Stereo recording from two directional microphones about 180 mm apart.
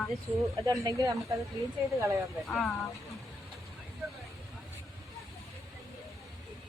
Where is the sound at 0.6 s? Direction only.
20° right (ahead or behind).